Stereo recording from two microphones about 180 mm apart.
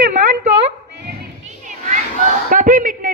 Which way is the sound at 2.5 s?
45° right (ahead or behind).